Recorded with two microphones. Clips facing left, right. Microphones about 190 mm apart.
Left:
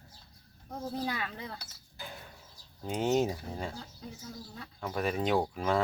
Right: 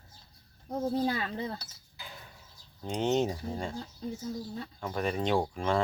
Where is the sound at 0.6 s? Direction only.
30° right (ahead or behind).